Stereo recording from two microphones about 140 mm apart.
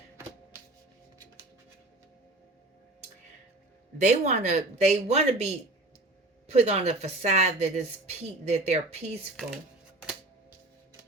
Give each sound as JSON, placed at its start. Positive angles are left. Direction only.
{"t": 3.9, "sound": "speech", "side_deg": -55}
{"t": 6.5, "sound": "speech", "side_deg": -50}